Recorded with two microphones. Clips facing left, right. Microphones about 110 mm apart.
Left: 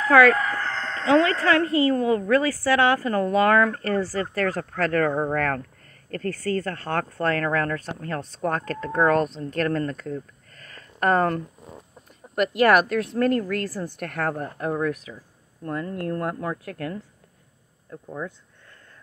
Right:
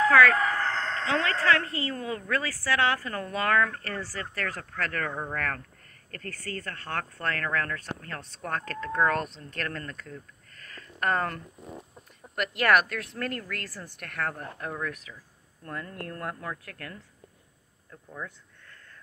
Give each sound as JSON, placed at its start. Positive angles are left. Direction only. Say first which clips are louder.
{"t": 1.0, "sound": "a woman's voice", "louder": "left 8 dB", "side_deg": 15}
{"t": 13.8, "sound": "a woman's voice", "louder": "left 6 dB", "side_deg": 35}